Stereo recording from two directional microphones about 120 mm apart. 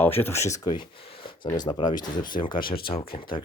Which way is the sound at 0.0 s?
20° left (ahead or behind).